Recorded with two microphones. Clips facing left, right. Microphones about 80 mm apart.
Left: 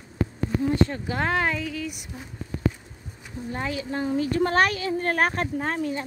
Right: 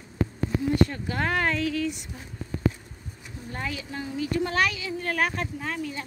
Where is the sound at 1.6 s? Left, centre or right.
Centre.